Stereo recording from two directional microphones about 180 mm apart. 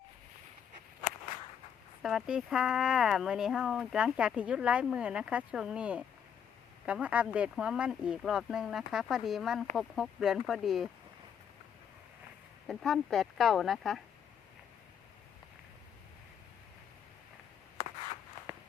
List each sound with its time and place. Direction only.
2.0 s speech: centre (ahead or behind)
12.6 s speech: centre (ahead or behind)